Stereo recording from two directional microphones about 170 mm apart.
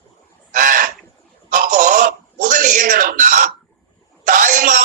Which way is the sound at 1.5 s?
50° right (ahead or behind).